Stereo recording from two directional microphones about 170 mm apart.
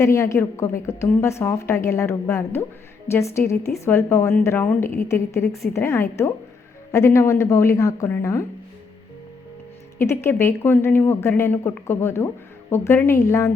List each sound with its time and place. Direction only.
0.0 s a woman's voice: 15° left (ahead or behind)
10.0 s a woman's voice: 15° left (ahead or behind)